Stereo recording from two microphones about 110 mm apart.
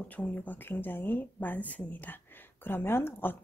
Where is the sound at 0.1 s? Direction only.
15° left (ahead or behind).